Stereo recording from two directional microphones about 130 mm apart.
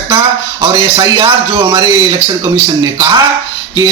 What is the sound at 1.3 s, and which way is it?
A man's voice, 20° right (ahead or behind).